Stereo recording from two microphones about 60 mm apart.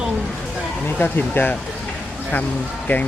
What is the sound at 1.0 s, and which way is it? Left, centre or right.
Speech, left.